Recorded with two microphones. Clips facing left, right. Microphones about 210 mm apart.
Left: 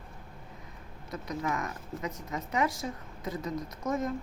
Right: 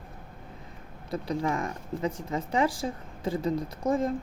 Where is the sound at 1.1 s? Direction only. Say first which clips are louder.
Right 5 dB; 30° right (ahead or behind).